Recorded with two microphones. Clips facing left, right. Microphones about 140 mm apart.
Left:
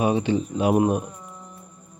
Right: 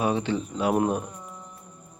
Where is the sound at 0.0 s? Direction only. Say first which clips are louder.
Left 4 dB; 15° left (ahead or behind).